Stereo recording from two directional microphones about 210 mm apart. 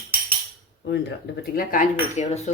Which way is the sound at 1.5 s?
35° left (ahead or behind).